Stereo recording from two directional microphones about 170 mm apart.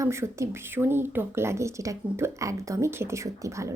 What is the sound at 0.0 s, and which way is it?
Speech, 15° right (ahead or behind).